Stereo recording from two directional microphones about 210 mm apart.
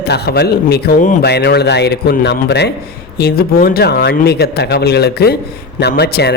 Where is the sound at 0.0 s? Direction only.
50° left (ahead or behind).